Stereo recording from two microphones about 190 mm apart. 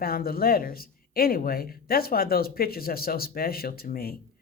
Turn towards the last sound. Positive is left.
turn(degrees=50)  # may be behind; listen again after turning